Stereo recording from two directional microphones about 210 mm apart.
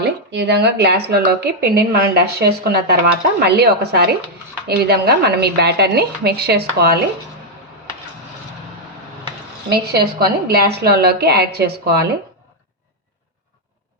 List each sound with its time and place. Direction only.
0.0 s a woman's voice: 55° right (ahead or behind)
9.6 s a woman's voice: 50° right (ahead or behind)